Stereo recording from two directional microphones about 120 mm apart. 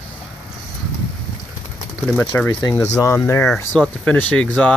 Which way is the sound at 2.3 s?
15° left (ahead or behind).